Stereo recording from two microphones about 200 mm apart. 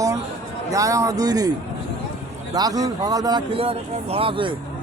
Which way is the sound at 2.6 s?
20° right (ahead or behind).